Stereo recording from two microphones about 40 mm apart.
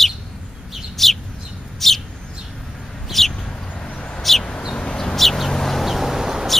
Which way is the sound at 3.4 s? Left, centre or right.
Centre.